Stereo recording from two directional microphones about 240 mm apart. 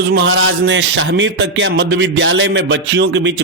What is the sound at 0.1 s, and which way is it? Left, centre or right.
Speech, right.